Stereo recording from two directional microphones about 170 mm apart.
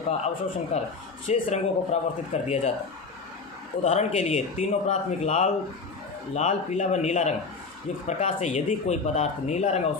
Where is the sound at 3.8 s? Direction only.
40° left (ahead or behind).